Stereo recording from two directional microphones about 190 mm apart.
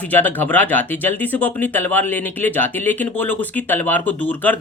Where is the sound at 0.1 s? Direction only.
10° left (ahead or behind).